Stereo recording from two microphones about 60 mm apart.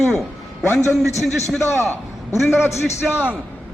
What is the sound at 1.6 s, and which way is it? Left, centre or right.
A man's voice, left.